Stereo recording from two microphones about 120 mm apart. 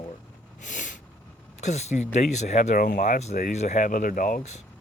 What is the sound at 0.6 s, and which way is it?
Snort, 90° left.